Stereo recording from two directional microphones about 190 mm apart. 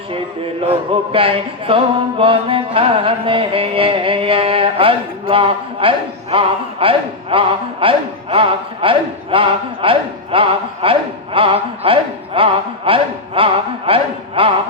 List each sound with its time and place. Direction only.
0.7 s speech: 30° right (ahead or behind)